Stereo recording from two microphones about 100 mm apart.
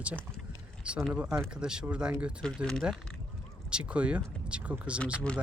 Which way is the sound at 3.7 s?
10° right (ahead or behind).